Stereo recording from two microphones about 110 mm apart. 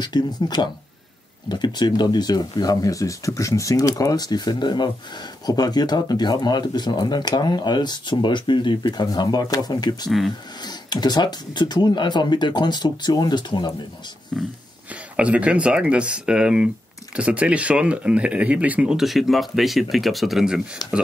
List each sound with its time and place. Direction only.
0.0 s speech: 40° left (ahead or behind)
10.0 s speech: centre (ahead or behind)
10.6 s speech: 40° left (ahead or behind)
14.3 s speech: 5° right (ahead or behind)